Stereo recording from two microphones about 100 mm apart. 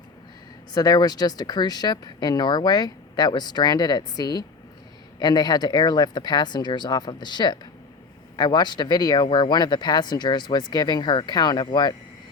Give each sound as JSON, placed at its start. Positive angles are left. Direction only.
{"t": 0.7, "sound": "speech", "side_deg": 40}